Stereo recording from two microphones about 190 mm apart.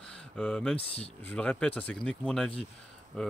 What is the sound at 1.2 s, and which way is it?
Speech, 5° left (ahead or behind).